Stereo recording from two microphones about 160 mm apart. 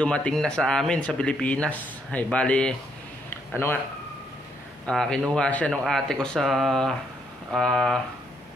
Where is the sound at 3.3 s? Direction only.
15° left (ahead or behind).